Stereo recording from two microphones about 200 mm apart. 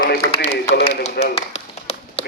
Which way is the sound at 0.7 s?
30° left (ahead or behind).